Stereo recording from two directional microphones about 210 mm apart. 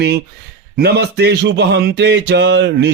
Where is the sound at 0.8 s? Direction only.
50° right (ahead or behind).